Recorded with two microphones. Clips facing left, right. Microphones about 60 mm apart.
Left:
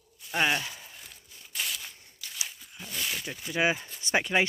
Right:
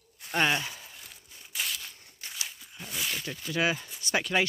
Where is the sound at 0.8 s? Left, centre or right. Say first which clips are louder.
Even; centre.